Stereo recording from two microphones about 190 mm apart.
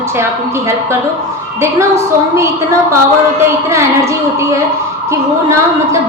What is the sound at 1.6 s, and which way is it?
Child singing, 15° right (ahead or behind).